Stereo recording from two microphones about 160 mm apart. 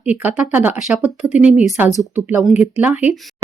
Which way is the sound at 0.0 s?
10° right (ahead or behind).